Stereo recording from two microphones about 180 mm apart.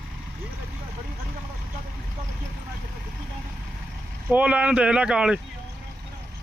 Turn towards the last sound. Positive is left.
turn(degrees=-5)  # may be behind; listen again after turning